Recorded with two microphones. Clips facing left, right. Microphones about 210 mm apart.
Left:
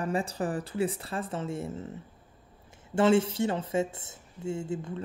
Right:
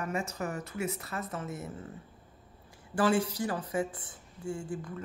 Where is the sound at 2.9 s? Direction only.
25° left (ahead or behind).